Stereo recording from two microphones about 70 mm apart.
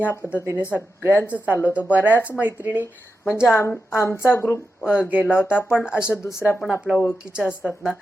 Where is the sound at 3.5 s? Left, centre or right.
Left.